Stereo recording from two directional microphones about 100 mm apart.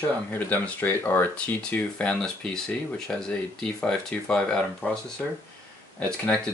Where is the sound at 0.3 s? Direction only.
20° left (ahead or behind).